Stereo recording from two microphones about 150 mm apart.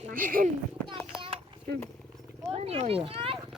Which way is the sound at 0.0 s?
65° right (ahead or behind).